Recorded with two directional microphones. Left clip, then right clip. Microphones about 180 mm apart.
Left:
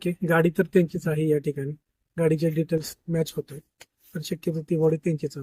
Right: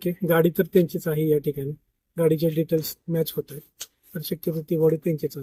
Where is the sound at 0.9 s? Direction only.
5° left (ahead or behind).